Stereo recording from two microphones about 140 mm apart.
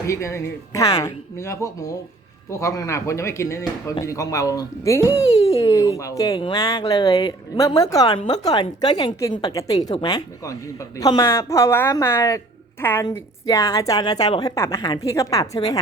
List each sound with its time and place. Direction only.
0.1 s a woman's voice: 20° left (ahead or behind)